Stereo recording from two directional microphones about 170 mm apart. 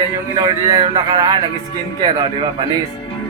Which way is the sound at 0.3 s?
25° right (ahead or behind).